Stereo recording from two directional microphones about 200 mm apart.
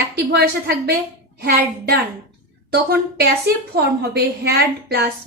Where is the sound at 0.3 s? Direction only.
50° right (ahead or behind).